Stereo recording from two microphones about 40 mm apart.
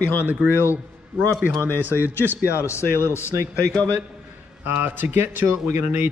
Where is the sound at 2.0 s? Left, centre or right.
Right.